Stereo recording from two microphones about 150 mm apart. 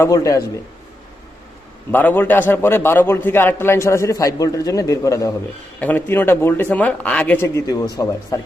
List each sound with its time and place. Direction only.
0.0 s a man's voice: 20° left (ahead or behind)
1.9 s a man's voice: 10° left (ahead or behind)